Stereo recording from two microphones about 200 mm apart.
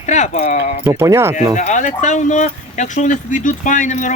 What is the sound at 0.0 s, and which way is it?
Speech, 35° left (ahead or behind).